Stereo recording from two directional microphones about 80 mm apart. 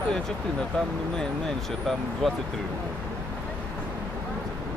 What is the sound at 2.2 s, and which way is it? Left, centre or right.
Speech, centre.